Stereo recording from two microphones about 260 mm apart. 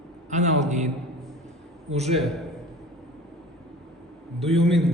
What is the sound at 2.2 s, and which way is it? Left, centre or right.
Speech, centre.